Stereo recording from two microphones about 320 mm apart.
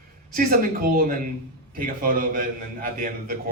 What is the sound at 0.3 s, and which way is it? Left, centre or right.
A man's voice, right.